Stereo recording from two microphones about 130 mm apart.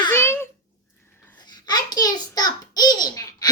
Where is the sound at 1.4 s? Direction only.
30° left (ahead or behind).